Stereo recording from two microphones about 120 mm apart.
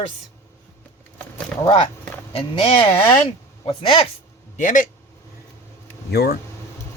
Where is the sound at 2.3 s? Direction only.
50° left (ahead or behind).